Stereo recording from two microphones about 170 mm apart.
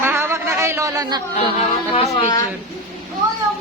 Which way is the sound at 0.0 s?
15° right (ahead or behind).